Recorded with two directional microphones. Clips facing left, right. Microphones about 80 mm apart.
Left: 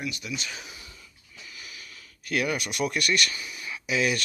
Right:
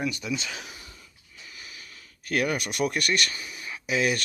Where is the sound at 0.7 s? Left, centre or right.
Right.